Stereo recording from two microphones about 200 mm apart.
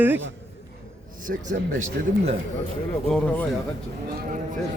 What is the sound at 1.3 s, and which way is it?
Speech, 50° right (ahead or behind).